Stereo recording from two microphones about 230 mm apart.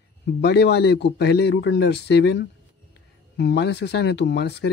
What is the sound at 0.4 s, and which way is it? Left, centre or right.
A man's voice, left.